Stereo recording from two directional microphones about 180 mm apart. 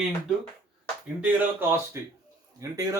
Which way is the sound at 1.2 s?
10° right (ahead or behind).